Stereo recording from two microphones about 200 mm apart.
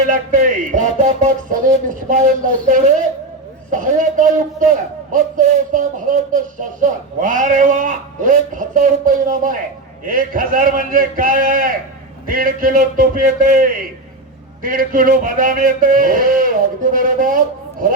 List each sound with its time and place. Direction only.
0.1 s a man's voice: 40° right (ahead or behind)